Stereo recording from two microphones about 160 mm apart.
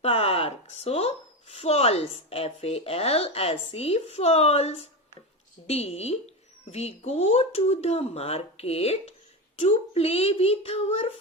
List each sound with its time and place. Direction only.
0.0 s a woman's voice: 40° left (ahead or behind)